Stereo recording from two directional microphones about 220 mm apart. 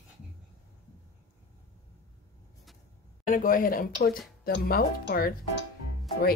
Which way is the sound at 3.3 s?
40° left (ahead or behind).